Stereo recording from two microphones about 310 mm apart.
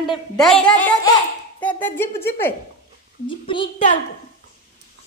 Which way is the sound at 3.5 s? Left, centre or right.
Centre.